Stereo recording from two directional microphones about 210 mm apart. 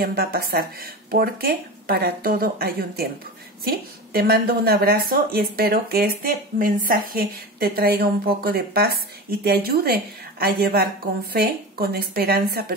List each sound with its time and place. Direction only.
0.0 s a woman's voice: 45° right (ahead or behind)